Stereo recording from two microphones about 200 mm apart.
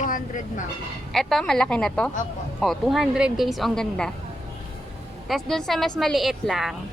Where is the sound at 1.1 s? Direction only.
Centre (ahead or behind).